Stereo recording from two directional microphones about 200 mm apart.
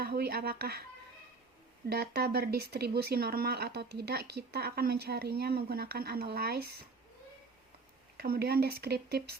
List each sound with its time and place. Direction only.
0.0 s speech: 50° right (ahead or behind)
1.9 s speech: 50° right (ahead or behind)
8.1 s speech: 50° right (ahead or behind)